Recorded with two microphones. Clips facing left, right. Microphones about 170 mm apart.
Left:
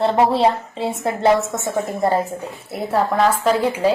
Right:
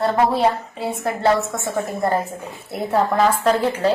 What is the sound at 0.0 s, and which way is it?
A woman's voice, 25° left (ahead or behind).